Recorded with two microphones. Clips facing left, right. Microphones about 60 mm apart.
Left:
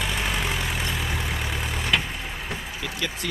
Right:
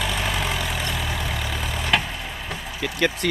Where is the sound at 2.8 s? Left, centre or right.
Right.